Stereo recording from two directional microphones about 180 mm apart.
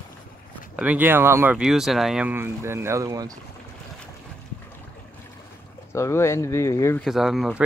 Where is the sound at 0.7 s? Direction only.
10° right (ahead or behind).